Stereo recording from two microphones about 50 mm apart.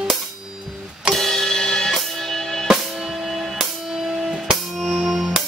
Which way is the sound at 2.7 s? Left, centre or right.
Centre.